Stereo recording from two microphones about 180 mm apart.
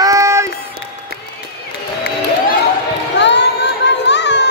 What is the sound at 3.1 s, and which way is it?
Music, 75° left (ahead or behind).